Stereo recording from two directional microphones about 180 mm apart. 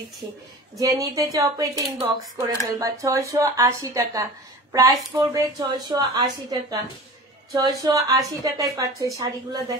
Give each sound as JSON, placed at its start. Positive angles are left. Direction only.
{"t": 0.7, "sound": "speech", "side_deg": -20}